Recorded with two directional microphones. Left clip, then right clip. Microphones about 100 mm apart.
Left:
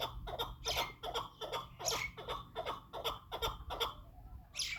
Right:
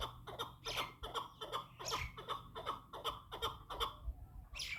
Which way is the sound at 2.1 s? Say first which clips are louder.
Left 3 dB; 5° right (ahead or behind).